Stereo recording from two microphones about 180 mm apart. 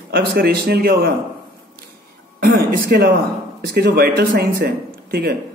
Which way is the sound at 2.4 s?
60° right (ahead or behind).